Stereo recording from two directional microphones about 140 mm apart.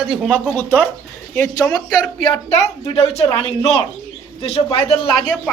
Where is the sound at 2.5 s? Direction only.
50° left (ahead or behind).